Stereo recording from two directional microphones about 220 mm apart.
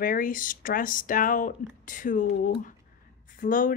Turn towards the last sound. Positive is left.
turn(degrees=40)  # may be behind; listen again after turning